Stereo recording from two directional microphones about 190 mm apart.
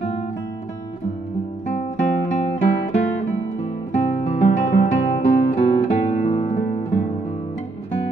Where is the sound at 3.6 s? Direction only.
35° left (ahead or behind).